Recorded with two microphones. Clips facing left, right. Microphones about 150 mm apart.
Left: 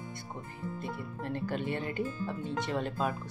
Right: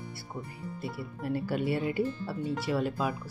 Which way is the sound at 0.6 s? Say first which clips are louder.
Left 2 dB; 45° left (ahead or behind).